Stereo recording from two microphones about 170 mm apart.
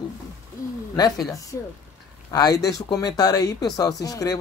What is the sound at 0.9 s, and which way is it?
Speech, 20° left (ahead or behind).